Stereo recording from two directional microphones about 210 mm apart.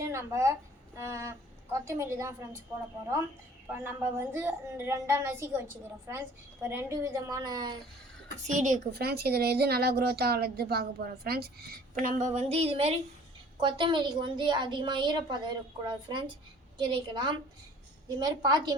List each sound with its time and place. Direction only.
0.0 s a woman's voice: 15° right (ahead or behind)
3.7 s a woman's voice: 10° right (ahead or behind)
8.4 s a woman's voice: 35° right (ahead or behind)
12.0 s a woman's voice: 35° right (ahead or behind)